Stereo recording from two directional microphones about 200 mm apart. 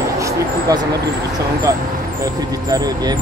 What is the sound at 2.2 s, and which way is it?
Speech, 20° right (ahead or behind).